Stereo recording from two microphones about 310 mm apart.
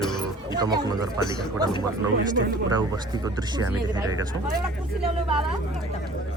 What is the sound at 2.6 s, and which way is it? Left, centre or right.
Speech, centre.